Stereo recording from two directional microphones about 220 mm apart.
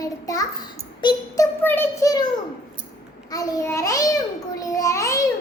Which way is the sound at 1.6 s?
10° left (ahead or behind).